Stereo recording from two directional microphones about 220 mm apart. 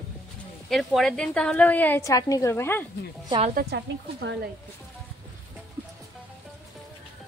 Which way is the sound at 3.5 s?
50° right (ahead or behind).